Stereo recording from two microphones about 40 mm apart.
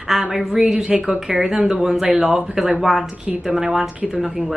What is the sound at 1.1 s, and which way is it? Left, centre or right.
A woman's voice, centre.